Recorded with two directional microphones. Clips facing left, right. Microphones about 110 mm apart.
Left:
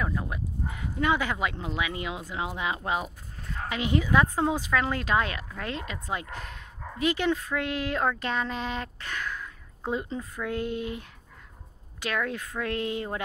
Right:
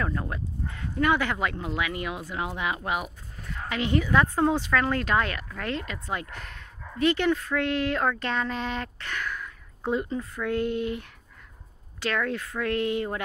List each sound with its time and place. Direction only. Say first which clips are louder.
0.0 s speech: right 1 dB; 10° left (ahead or behind)